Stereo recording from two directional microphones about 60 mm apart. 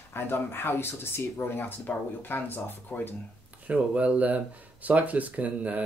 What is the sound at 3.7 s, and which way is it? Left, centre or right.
Speech, right.